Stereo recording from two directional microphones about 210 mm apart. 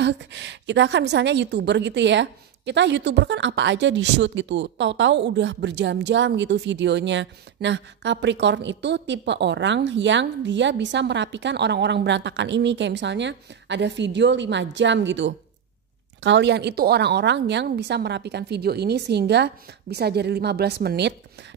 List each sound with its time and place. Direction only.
0.0 s a woman's voice: 60° right (ahead or behind)